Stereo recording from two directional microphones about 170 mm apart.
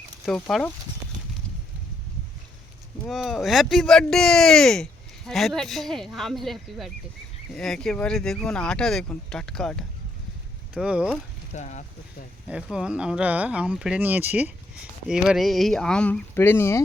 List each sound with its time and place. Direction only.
0.3 s speech: 5° left (ahead or behind)
3.1 s speech: centre (ahead or behind)
11.5 s speech: 45° left (ahead or behind)
12.6 s speech: 5° right (ahead or behind); by 16.8 s 15° left (ahead or behind)